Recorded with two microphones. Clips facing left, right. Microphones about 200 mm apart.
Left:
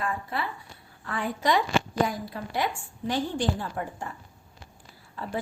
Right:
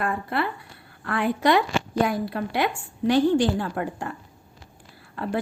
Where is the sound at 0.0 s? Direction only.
65° right (ahead or behind).